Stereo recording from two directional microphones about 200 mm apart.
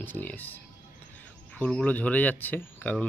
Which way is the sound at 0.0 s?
10° left (ahead or behind).